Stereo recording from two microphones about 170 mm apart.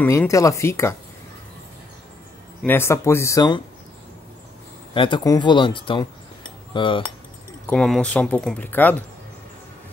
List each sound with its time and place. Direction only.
0.0 s speech: 15° left (ahead or behind)
2.6 s speech: 15° left (ahead or behind)
4.9 s speech: 30° left (ahead or behind)
7.7 s speech: 5° left (ahead or behind)